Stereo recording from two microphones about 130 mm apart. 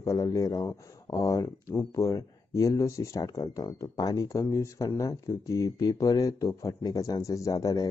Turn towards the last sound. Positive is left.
turn(degrees=30)  # may be behind; listen again after turning